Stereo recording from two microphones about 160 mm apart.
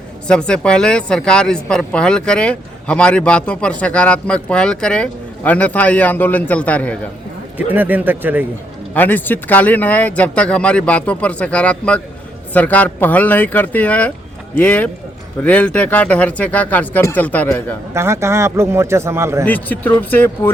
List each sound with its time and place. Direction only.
0.3 s speech: 5° left (ahead or behind)
7.7 s a man's voice: 10° right (ahead or behind)
9.0 s speech: 10° left (ahead or behind)
17.9 s a man's voice: 15° right (ahead or behind)
19.5 s speech: 10° left (ahead or behind)